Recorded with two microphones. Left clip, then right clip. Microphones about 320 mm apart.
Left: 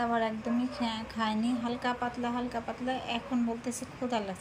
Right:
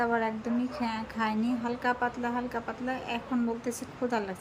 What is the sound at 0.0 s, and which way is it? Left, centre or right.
A woman's voice, centre.